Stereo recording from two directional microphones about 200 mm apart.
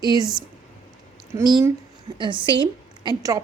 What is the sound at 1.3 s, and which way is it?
A woman's voice, 20° right (ahead or behind).